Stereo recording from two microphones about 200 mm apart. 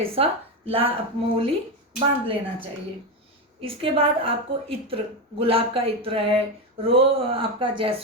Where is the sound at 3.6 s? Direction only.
25° right (ahead or behind).